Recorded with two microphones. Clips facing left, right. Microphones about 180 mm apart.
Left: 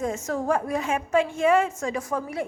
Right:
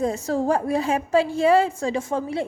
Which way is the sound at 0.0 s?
35° right (ahead or behind).